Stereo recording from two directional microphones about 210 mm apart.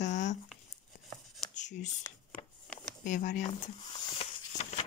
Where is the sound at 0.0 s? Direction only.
35° left (ahead or behind).